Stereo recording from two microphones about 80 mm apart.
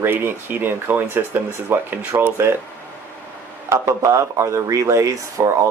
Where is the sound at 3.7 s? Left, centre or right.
Right.